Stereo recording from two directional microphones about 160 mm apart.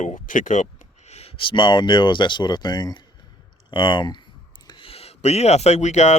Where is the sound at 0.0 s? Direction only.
50° left (ahead or behind).